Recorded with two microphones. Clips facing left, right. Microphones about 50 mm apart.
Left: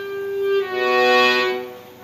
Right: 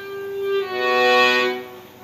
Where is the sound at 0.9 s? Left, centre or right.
Left.